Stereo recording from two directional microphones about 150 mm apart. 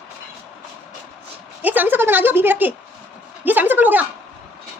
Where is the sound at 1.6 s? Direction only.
10° right (ahead or behind).